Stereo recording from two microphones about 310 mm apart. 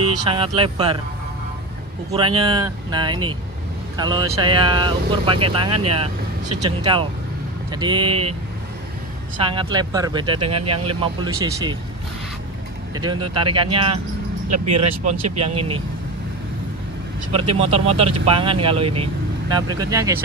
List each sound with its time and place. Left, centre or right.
0.3 s speech: centre
2.0 s speech: centre
9.4 s speech: centre
12.9 s speech: centre
14.5 s speech: right
14.8 s speech: centre
17.3 s speech: centre